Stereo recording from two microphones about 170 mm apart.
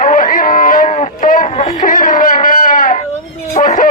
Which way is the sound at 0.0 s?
50° left (ahead or behind).